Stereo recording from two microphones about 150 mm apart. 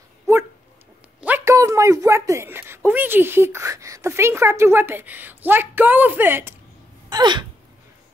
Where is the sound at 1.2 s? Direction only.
15° right (ahead or behind).